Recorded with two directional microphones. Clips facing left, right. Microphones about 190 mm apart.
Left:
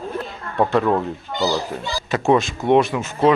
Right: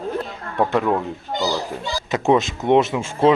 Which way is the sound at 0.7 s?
15° right (ahead or behind).